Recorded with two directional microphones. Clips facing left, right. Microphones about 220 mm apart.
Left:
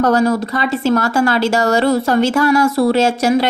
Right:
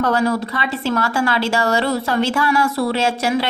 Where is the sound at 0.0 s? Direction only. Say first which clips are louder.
Left 4 dB; 45° left (ahead or behind).